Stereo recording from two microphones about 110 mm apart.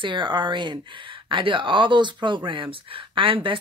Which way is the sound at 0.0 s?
45° right (ahead or behind).